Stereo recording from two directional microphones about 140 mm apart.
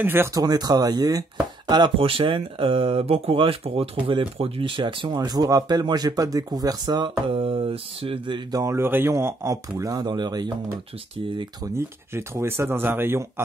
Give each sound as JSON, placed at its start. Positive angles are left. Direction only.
{"t": 0.0, "sound": "speech", "side_deg": -15}
{"t": 0.4, "sound": "speech", "side_deg": -30}
{"t": 7.2, "sound": "speech", "side_deg": -40}
{"t": 8.5, "sound": "speech", "side_deg": -25}
{"t": 11.6, "sound": "speech", "side_deg": -20}